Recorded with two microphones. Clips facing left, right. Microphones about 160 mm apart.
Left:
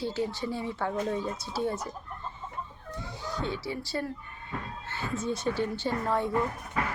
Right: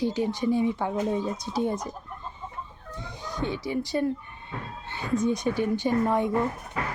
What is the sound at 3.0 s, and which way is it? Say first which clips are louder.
Speech: right 3 dB; 15° right (ahead or behind).